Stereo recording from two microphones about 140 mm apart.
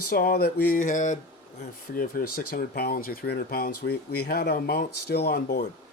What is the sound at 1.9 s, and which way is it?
Speech, 90° left.